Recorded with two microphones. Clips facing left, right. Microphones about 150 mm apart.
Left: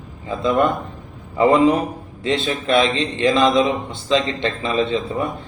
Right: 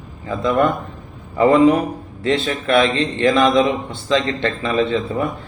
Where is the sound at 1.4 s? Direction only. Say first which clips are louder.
Right 2 dB; 20° left (ahead or behind).